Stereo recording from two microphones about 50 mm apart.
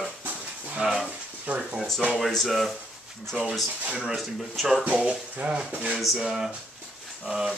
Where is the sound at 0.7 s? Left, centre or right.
Centre.